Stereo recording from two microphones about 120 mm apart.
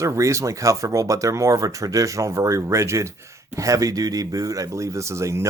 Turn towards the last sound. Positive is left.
turn(degrees=-25)  # may be behind; listen again after turning